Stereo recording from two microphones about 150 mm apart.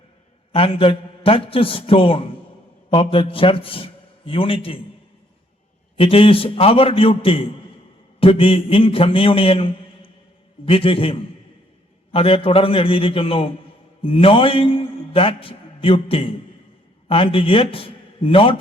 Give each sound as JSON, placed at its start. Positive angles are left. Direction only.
{"t": 0.5, "sound": "a man's voice", "side_deg": 40}
{"t": 6.0, "sound": "a man's voice", "side_deg": 35}